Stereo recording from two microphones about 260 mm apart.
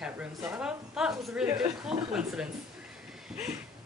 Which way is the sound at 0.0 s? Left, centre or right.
Centre.